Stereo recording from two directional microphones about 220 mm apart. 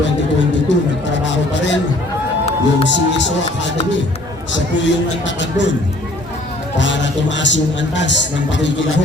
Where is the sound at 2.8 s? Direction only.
55° left (ahead or behind).